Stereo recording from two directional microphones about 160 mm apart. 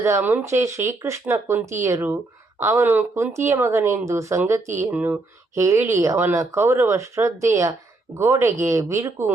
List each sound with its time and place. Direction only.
0.0 s speech: 15° right (ahead or behind)